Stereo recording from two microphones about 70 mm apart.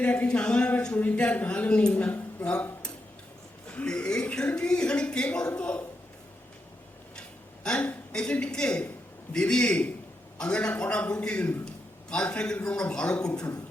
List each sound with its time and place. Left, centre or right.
0.0 s speech: centre
3.7 s speech: centre
7.6 s a woman's voice: centre